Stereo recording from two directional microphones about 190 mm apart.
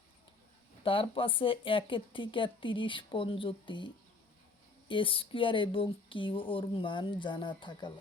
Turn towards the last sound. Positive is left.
turn(degrees=25)  # may be behind; listen again after turning